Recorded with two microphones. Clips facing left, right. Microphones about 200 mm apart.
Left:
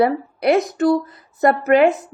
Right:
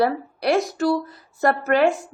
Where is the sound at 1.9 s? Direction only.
20° left (ahead or behind).